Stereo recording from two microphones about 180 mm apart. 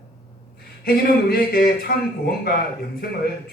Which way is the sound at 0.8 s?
55° left (ahead or behind).